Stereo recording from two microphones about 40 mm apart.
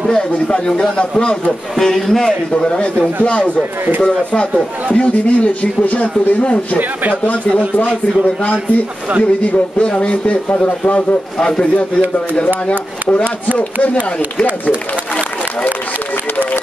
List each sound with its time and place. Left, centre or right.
0.5 s a man's voice: left
1.8 s a man's voice: centre
2.5 s a man's voice: left
9.4 s speech: left
11.3 s a man's voice: centre